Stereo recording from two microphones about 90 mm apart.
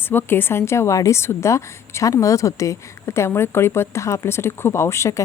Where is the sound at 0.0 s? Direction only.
25° left (ahead or behind).